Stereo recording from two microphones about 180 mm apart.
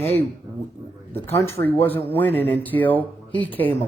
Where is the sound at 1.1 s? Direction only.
15° left (ahead or behind).